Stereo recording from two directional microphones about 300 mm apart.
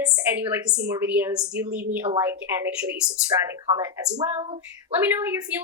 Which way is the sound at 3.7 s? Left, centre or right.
Centre.